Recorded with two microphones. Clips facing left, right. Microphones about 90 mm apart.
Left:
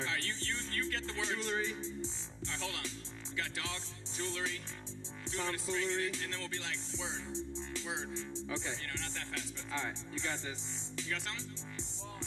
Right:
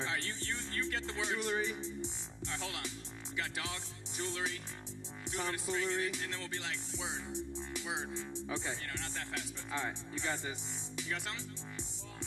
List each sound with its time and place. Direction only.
0.0 s music: 20° right (ahead or behind)